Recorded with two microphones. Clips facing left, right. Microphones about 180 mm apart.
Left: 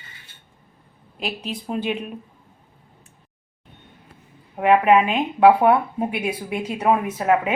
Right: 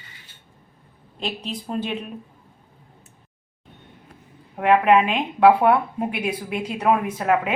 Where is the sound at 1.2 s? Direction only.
5° left (ahead or behind).